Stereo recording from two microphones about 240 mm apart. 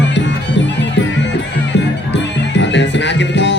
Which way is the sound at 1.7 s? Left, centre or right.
Left.